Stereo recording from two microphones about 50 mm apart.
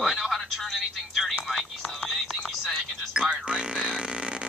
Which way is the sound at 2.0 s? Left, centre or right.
Centre.